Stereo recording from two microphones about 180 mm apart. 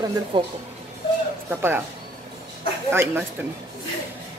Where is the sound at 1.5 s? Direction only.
10° right (ahead or behind).